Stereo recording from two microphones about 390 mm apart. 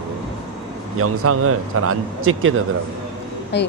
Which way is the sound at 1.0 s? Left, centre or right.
Right.